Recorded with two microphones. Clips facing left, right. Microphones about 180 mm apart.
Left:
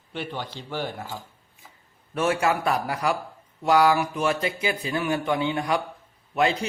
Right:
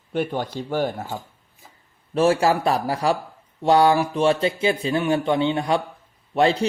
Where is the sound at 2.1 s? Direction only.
30° right (ahead or behind).